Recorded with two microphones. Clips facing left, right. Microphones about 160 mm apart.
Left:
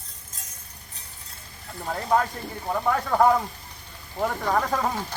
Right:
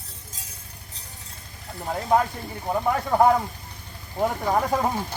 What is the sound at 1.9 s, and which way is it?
Speech, 10° right (ahead or behind).